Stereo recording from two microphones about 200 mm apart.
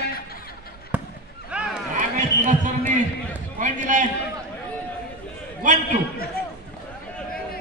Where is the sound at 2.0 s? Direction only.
40° right (ahead or behind).